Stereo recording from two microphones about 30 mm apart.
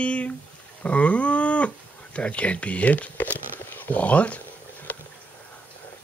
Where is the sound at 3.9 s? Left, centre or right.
Left.